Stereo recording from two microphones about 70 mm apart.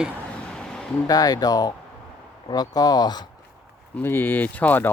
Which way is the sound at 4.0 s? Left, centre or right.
Left.